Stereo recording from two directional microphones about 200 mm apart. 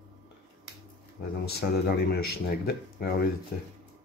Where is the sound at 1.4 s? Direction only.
55° left (ahead or behind).